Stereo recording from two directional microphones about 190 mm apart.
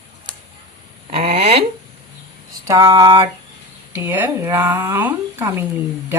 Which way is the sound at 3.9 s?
10° right (ahead or behind).